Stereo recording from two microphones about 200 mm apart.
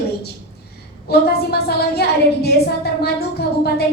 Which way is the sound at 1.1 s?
50° left (ahead or behind).